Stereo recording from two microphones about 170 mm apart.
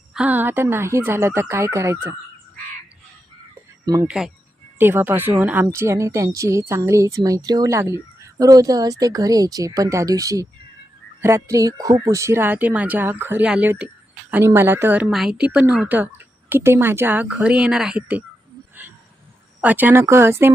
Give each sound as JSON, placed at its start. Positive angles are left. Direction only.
{"t": 0.1, "sound": "speech", "side_deg": -10}
{"t": 4.0, "sound": "speech", "side_deg": -5}
{"t": 15.1, "sound": "speech", "side_deg": -5}
{"t": 19.6, "sound": "speech", "side_deg": -10}